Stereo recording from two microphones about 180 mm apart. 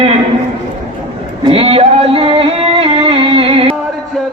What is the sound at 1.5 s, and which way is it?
Singing, 30° right (ahead or behind).